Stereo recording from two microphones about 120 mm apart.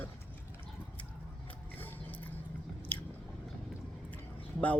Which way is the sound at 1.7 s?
15° left (ahead or behind).